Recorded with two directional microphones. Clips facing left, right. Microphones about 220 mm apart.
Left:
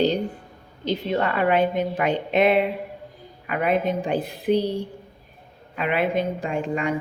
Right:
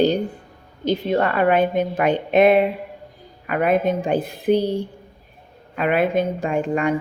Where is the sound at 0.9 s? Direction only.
50° right (ahead or behind).